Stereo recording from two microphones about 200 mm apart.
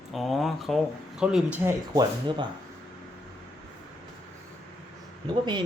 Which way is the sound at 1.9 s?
20° right (ahead or behind).